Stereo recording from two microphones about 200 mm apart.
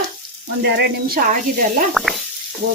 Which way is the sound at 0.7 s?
45° right (ahead or behind).